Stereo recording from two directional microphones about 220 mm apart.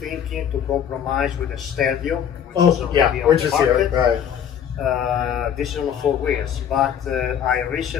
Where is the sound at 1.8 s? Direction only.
Centre (ahead or behind).